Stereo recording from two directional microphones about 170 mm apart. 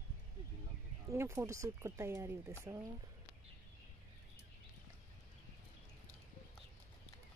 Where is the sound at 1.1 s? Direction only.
15° right (ahead or behind).